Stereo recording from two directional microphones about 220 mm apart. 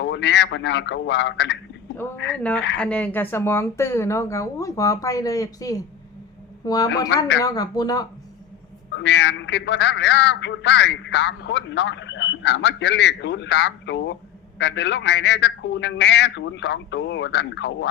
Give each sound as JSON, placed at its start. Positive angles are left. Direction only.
{"t": 0.0, "sound": "a man's voice", "side_deg": 55}
{"t": 2.3, "sound": "speech", "side_deg": 5}
{"t": 8.9, "sound": "a man's voice", "side_deg": 55}